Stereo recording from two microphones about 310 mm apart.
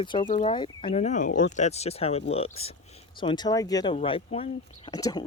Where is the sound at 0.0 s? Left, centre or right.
Centre.